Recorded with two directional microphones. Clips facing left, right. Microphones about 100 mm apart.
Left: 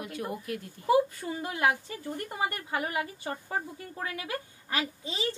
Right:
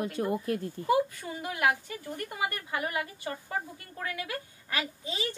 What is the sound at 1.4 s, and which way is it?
A woman's voice, 25° left (ahead or behind).